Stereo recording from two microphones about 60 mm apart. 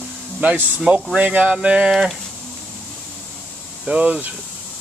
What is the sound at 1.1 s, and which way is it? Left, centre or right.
Speech, right.